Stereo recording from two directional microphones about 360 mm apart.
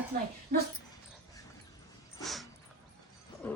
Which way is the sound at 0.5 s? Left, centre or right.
Centre.